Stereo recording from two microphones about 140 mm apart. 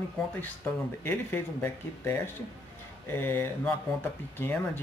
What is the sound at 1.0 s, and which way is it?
Speech, 15° left (ahead or behind).